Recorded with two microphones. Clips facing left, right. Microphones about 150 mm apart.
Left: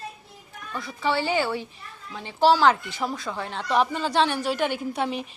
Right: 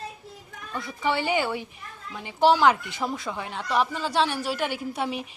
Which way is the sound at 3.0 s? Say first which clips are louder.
Left 1 dB; centre (ahead or behind).